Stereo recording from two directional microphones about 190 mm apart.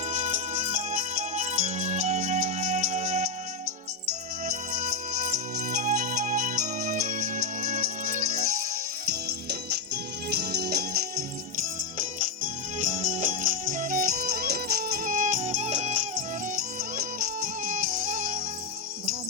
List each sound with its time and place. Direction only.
0.1 s music: 40° right (ahead or behind)
4.7 s music: 40° right (ahead or behind)
9.0 s music: 55° right (ahead or behind)
11.5 s music: 45° right (ahead or behind)